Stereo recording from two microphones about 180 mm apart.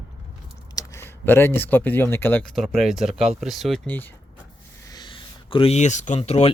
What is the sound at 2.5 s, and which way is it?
Speech, centre (ahead or behind).